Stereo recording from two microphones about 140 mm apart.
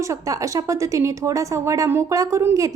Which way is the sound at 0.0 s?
20° right (ahead or behind).